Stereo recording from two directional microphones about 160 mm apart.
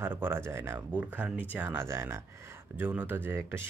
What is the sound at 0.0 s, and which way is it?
Speech, 15° right (ahead or behind).